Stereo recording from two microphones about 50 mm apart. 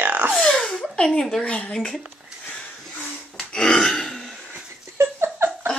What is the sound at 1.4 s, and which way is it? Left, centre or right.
Speech, left.